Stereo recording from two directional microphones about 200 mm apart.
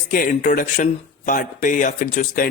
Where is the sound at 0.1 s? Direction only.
45° left (ahead or behind).